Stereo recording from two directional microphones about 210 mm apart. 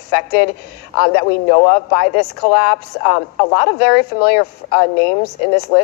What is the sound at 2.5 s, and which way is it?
Speech, 40° left (ahead or behind).